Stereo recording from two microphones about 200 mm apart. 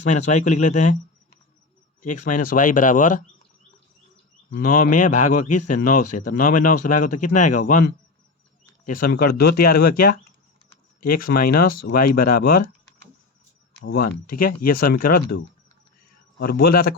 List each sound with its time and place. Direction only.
0.0 s speech: 35° left (ahead or behind)
2.0 s speech: 40° left (ahead or behind)
4.6 s speech: 40° left (ahead or behind)
13.8 s speech: 50° left (ahead or behind)
16.4 s speech: 50° left (ahead or behind)